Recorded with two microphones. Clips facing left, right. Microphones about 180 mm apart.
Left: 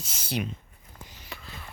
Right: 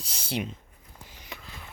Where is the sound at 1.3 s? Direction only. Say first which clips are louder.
Even; 15° right (ahead or behind).